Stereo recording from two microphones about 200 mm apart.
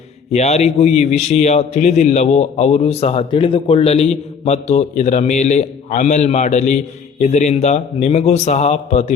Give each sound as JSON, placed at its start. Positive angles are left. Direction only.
{"t": 0.3, "sound": "a man's voice", "side_deg": 35}